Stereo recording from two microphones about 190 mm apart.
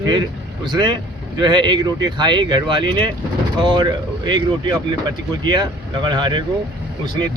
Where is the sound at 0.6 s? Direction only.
20° right (ahead or behind).